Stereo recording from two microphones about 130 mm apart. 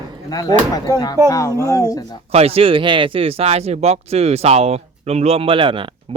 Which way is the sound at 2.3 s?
50° right (ahead or behind).